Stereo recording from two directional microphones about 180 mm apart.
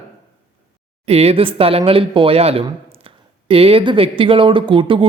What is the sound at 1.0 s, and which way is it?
Speech, 35° right (ahead or behind).